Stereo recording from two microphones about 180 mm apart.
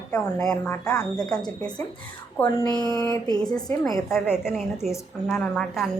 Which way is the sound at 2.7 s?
20° left (ahead or behind).